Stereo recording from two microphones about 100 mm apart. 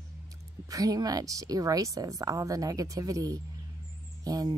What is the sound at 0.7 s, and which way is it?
Speech, 35° right (ahead or behind).